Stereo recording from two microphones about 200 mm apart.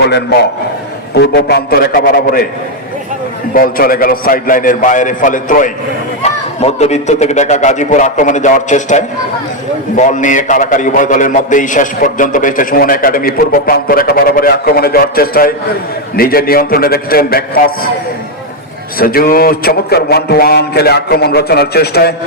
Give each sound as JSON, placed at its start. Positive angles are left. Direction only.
{"t": 1.1, "sound": "a man's voice", "side_deg": 55}
{"t": 3.5, "sound": "a man's voice", "side_deg": 45}
{"t": 18.9, "sound": "a man's voice", "side_deg": 45}